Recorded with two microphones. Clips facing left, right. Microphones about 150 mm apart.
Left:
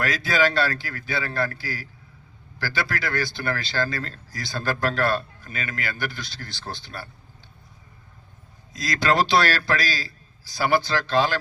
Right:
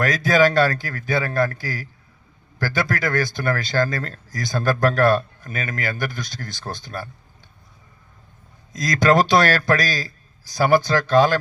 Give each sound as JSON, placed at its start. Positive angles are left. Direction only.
{"t": 0.0, "sound": "speech", "side_deg": -45}
{"t": 8.7, "sound": "speech", "side_deg": -45}